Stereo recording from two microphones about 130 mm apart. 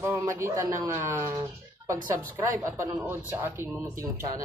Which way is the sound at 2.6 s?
25° right (ahead or behind).